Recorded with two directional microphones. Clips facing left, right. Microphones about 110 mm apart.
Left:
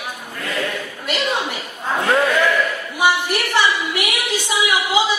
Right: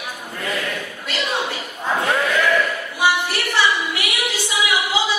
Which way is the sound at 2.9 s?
15° left (ahead or behind).